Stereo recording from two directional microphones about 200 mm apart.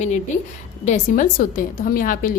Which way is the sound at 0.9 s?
40° left (ahead or behind).